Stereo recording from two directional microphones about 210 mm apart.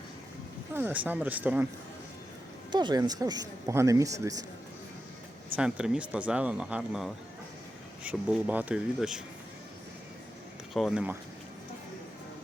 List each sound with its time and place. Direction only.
0.7 s speech: 10° right (ahead or behind)
2.7 s speech: 20° right (ahead or behind)
5.5 s speech: 5° right (ahead or behind)
10.8 s speech: centre (ahead or behind)